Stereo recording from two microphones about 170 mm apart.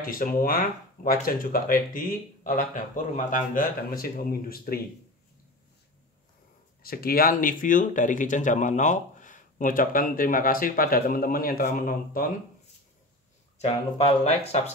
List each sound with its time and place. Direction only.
0.0 s speech: 55° left (ahead or behind)
6.8 s speech: 60° left (ahead or behind)
13.6 s speech: 40° left (ahead or behind)